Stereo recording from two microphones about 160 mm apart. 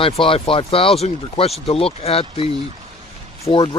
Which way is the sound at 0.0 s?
35° left (ahead or behind).